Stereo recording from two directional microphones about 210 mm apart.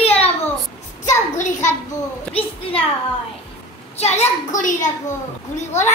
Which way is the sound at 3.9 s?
30° left (ahead or behind).